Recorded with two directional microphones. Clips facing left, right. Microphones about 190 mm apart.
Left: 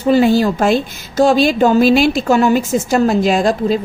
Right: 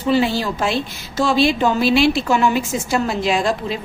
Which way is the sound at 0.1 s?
45° left (ahead or behind).